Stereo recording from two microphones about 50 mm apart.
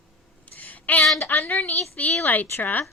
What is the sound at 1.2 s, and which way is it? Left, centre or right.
A woman's voice, left.